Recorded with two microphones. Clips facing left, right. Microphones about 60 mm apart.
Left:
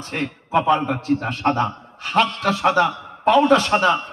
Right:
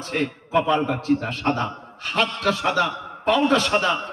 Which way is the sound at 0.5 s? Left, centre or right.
Left.